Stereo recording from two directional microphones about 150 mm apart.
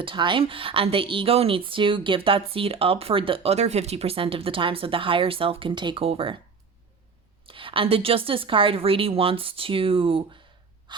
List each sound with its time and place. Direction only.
0.0 s speech: 35° right (ahead or behind)
7.4 s speech: 35° right (ahead or behind)